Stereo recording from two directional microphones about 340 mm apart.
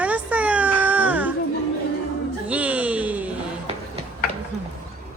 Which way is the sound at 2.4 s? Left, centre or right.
Centre.